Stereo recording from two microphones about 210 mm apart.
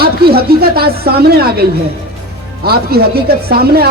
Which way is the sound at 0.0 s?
45° right (ahead or behind).